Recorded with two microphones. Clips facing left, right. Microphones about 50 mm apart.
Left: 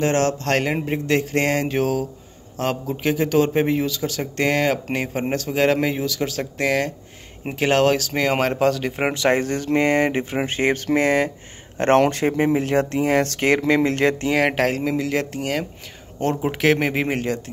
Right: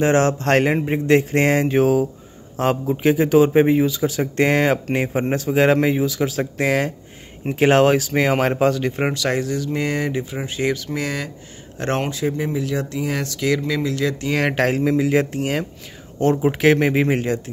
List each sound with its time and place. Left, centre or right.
0.0 s a man's voice: right; by 9.0 s centre
9.0 s speech: left
14.3 s speech: centre
14.9 s speech: centre